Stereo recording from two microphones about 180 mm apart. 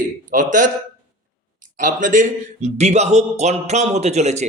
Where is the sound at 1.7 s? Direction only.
45° right (ahead or behind).